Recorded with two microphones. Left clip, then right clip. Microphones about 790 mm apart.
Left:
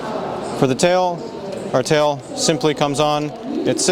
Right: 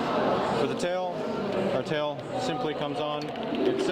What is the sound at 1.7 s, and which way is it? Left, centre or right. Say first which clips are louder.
Speech: left 12 dB; left.